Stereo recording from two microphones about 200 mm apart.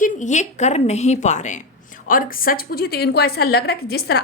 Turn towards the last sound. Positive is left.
turn(degrees=50)  # may be behind; listen again after turning